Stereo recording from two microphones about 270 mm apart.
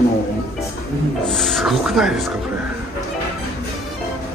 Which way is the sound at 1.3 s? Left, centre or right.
Centre.